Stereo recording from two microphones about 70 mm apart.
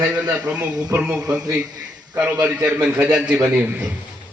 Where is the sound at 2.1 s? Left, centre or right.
Centre.